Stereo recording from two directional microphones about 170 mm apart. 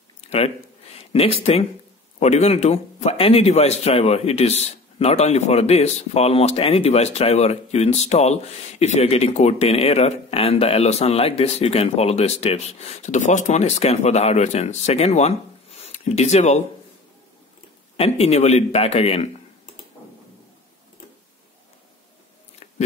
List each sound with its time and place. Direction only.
0.2 s a sound: 35° left (ahead or behind)
0.9 s a man's voice: 35° left (ahead or behind)
17.9 s a man's voice: 35° left (ahead or behind)